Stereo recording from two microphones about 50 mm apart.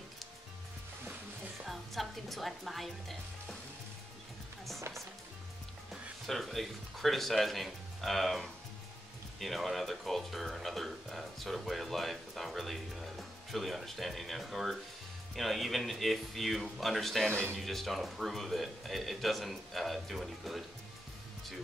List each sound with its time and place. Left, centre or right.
1.7 s a woman's voice: centre
6.2 s speech: centre
17.3 s speech: right
17.6 s speech: centre